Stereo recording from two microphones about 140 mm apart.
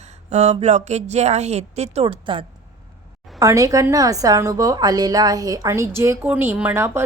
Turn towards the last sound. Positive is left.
turn(degrees=-15)  # may be behind; listen again after turning